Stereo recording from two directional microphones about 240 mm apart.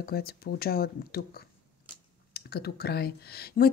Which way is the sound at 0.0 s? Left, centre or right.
Left.